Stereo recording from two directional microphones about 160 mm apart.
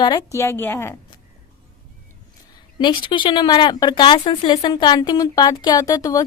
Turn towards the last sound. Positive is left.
turn(degrees=20)  # may be behind; listen again after turning